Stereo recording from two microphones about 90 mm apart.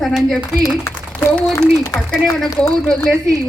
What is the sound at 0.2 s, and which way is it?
Speech, 10° left (ahead or behind).